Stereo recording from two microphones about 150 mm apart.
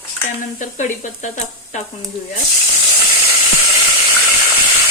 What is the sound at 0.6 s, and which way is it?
Sizzle, 55° left (ahead or behind).